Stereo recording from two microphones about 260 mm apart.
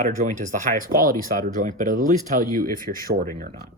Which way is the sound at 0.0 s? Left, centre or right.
Right.